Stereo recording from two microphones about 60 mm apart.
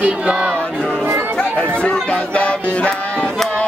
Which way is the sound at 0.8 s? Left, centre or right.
Centre.